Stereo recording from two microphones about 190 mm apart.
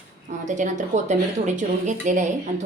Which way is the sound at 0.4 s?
40° right (ahead or behind).